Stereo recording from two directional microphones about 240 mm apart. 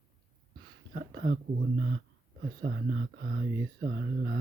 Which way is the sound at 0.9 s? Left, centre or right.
Right.